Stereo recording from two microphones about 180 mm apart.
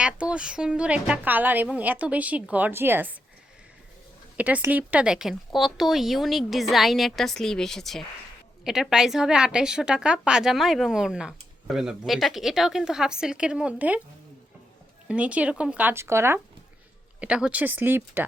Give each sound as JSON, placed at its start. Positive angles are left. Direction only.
{"t": 0.0, "sound": "a woman's voice", "side_deg": -5}
{"t": 4.4, "sound": "a woman's voice", "side_deg": -10}
{"t": 15.0, "sound": "a woman's voice", "side_deg": -5}